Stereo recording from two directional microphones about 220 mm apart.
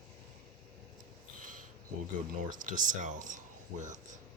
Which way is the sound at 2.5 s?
35° right (ahead or behind).